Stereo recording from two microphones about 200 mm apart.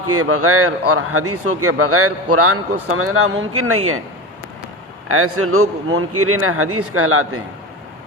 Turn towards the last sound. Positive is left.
turn(degrees=-90)